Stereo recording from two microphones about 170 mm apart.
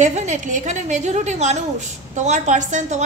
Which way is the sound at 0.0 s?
45° right (ahead or behind).